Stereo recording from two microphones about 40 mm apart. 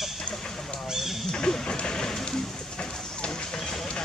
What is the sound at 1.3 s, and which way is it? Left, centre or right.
Speech, centre.